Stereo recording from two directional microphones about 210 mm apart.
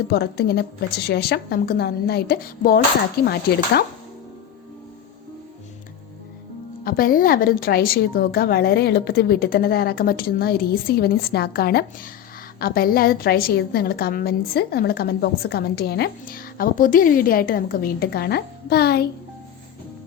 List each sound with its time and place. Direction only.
0.1 s a woman's voice: 50° left (ahead or behind)
6.8 s a woman's voice: 45° left (ahead or behind)